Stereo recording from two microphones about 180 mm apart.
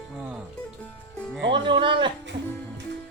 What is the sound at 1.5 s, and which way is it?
Speech, 25° right (ahead or behind).